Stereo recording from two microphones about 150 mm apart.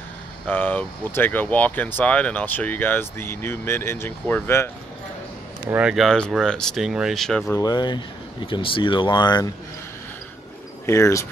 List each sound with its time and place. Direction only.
0.5 s speech: 10° left (ahead or behind)
5.6 s speech: 10° right (ahead or behind)
7.5 s speech: 25° left (ahead or behind)
10.9 s speech: 20° left (ahead or behind)